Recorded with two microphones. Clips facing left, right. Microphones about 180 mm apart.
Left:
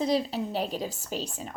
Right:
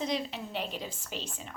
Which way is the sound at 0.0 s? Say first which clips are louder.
Left 7 dB; 35° left (ahead or behind).